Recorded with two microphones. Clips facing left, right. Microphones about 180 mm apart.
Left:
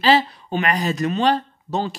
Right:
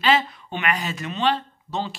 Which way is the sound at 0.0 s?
35° left (ahead or behind).